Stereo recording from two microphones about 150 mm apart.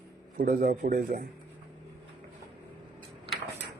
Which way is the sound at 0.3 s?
80° right.